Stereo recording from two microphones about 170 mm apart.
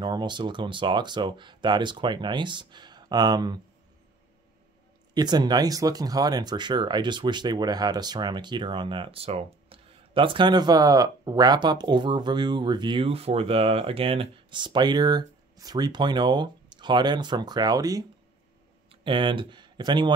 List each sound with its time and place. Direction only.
0.0 s speech: 25° right (ahead or behind)
5.1 s speech: 25° right (ahead or behind)